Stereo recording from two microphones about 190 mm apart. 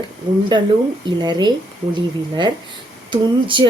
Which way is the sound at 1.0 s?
25° right (ahead or behind).